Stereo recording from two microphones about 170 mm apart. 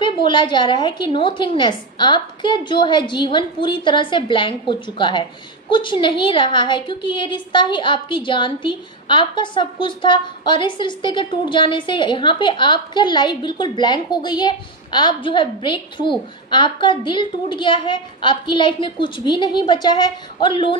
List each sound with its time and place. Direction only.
0.0 s a woman's voice: 30° left (ahead or behind)